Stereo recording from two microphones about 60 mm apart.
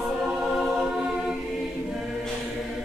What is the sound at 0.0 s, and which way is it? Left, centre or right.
Choir, centre.